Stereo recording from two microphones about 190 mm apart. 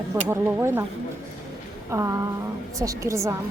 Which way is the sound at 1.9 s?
15° right (ahead or behind).